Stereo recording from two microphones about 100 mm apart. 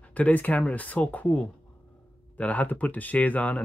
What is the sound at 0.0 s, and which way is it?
Speech, 15° left (ahead or behind).